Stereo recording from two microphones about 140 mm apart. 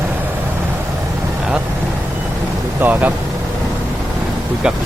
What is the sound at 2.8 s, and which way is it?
Vehicle, 15° right (ahead or behind).